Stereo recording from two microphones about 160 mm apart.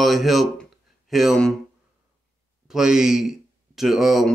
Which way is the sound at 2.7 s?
5° right (ahead or behind).